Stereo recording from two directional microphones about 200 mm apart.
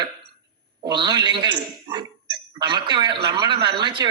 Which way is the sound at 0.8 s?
20° right (ahead or behind).